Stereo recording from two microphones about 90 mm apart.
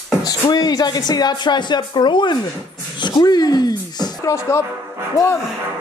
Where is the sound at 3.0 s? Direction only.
55° left (ahead or behind).